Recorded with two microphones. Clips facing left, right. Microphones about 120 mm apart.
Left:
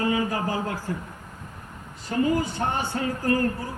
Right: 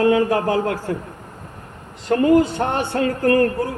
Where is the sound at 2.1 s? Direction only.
65° right (ahead or behind).